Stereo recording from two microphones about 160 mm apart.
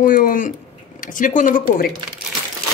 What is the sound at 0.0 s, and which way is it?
Speech, 60° left (ahead or behind).